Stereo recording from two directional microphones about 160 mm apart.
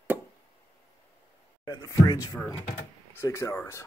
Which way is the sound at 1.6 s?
25° left (ahead or behind).